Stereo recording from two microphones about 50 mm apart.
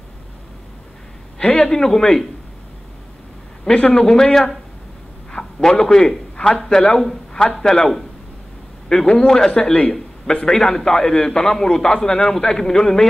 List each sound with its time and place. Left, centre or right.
1.4 s a sound: left
1.7 s a man's voice: centre
3.6 s a man's voice: centre